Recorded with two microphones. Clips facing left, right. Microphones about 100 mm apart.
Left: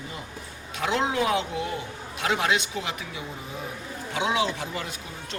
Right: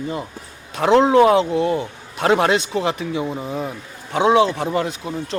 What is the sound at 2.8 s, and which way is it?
Speech, 35° right (ahead or behind).